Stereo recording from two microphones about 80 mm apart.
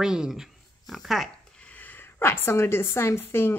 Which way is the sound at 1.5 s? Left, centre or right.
Centre.